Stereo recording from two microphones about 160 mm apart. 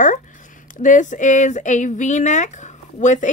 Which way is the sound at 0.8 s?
50° left (ahead or behind).